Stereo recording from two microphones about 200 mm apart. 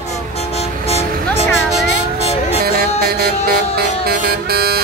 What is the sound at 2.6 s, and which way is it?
Music, 50° right (ahead or behind).